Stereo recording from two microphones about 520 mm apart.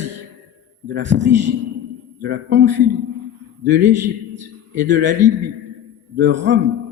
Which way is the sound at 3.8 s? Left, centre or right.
Centre.